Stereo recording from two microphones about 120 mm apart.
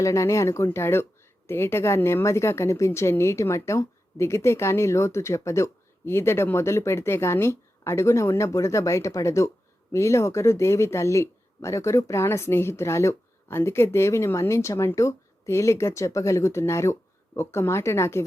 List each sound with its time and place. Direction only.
0.0 s speech: 25° left (ahead or behind)